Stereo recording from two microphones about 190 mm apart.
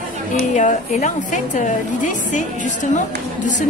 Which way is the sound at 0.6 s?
40° left (ahead or behind).